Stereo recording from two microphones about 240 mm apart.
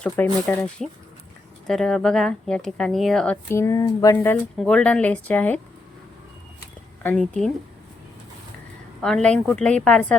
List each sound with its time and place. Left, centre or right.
0.4 s speech: centre
7.0 s speech: centre
9.0 s speech: centre